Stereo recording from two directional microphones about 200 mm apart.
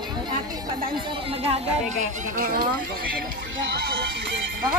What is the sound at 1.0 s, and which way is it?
Speech, 25° right (ahead or behind).